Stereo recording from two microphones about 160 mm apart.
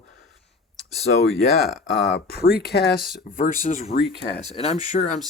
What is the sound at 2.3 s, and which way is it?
Speech, 80° left.